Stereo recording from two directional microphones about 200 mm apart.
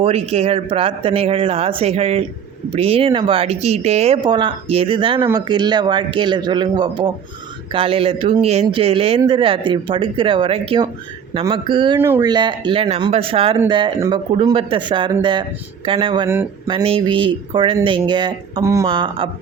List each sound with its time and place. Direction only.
0.0 s speech: 30° right (ahead or behind)
11.9 s speech: 10° right (ahead or behind)